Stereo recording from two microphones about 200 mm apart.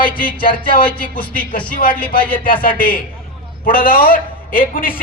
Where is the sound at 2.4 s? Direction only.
45° left (ahead or behind).